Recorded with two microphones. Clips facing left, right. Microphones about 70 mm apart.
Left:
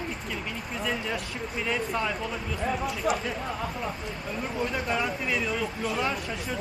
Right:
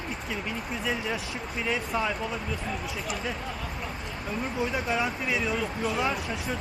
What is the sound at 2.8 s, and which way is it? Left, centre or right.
Speech, left.